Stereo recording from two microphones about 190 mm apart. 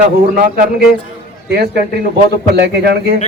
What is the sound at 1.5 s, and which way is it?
A man's voice, 55° right (ahead or behind).